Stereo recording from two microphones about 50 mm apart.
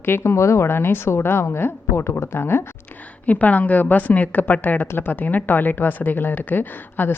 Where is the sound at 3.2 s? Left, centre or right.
Left.